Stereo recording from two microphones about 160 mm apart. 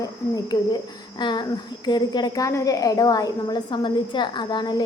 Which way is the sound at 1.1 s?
25° left (ahead or behind).